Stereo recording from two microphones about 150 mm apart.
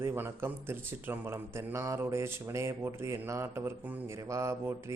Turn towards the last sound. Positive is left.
turn(degrees=-20)  # may be behind; listen again after turning